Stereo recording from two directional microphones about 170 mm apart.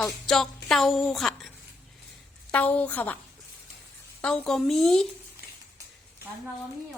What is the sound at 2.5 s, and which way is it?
Speech, 10° left (ahead or behind).